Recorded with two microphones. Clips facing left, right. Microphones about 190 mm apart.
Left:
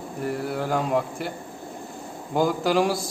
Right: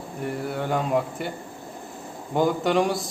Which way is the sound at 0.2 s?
Centre (ahead or behind).